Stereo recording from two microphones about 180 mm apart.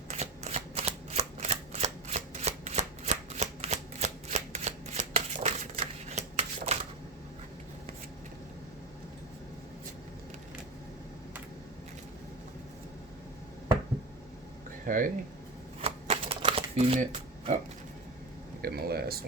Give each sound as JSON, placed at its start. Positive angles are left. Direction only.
{"t": 0.1, "sound": "shuffling cards", "side_deg": -35}
{"t": 14.8, "sound": "speech", "side_deg": -50}
{"t": 15.8, "sound": "shuffling cards", "side_deg": -35}
{"t": 18.6, "sound": "a sound", "side_deg": -60}